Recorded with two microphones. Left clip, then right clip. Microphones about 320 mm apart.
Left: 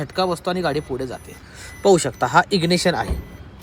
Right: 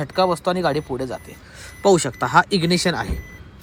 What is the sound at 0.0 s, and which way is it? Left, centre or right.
Speech, centre.